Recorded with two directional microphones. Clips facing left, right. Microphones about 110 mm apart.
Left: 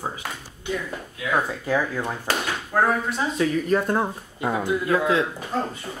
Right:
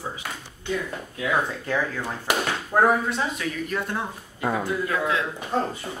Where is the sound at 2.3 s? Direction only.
15° right (ahead or behind).